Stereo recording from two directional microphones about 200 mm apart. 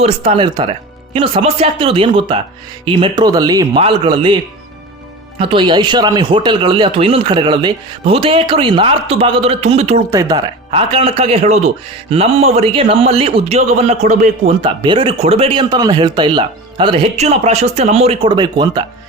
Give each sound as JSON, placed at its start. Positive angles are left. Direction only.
{"t": 0.0, "sound": "speech", "side_deg": -30}
{"t": 5.4, "sound": "speech", "side_deg": -25}
{"t": 10.1, "sound": "a man's voice", "side_deg": -15}